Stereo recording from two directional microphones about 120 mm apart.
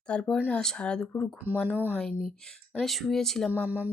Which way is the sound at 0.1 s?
10° left (ahead or behind).